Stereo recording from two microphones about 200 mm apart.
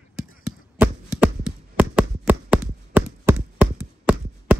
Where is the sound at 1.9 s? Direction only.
10° right (ahead or behind).